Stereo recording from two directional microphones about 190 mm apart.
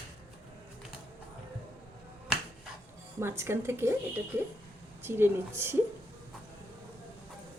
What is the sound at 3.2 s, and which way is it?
Speech, 15° right (ahead or behind).